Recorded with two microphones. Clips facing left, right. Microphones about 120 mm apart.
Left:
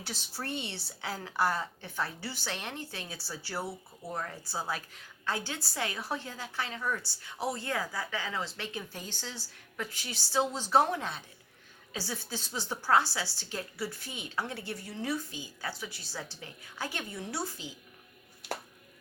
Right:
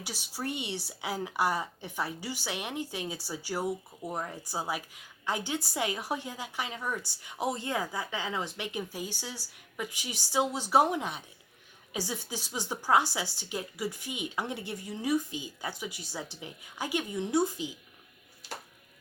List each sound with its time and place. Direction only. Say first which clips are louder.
0.0 s a woman's voice: right 3 dB; 10° right (ahead or behind)